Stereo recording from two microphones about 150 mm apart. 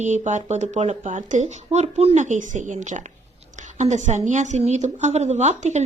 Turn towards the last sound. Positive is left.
turn(degrees=-50)  # may be behind; listen again after turning